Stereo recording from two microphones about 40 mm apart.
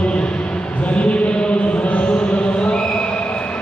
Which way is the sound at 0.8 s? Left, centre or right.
Left.